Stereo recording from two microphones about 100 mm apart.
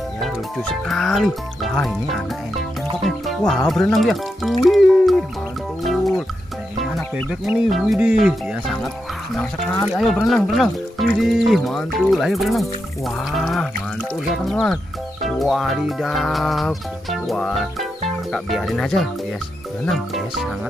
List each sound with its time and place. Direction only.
0.2 s speech: centre (ahead or behind)
5.9 s music: centre (ahead or behind)
7.2 s speech: 5° right (ahead or behind)
9.9 s speech: centre (ahead or behind)
15.2 s music: centre (ahead or behind)
19.9 s speech: centre (ahead or behind)